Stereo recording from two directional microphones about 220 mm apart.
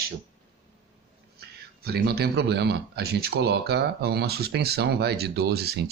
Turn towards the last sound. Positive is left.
turn(degrees=-45)  # may be behind; listen again after turning